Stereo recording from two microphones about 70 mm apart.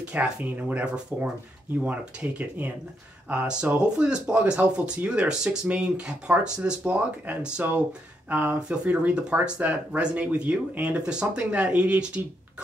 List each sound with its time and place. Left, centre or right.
0.0 s speech: centre